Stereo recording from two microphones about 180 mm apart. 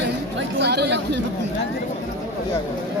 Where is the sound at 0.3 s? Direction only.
65° right (ahead or behind).